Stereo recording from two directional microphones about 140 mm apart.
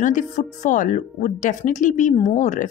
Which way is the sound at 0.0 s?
65° left (ahead or behind).